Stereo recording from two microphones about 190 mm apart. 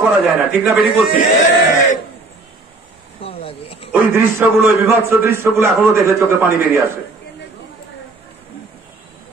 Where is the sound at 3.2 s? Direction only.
30° left (ahead or behind).